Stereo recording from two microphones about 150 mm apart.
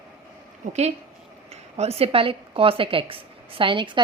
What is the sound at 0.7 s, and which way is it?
A woman's voice, 45° right (ahead or behind).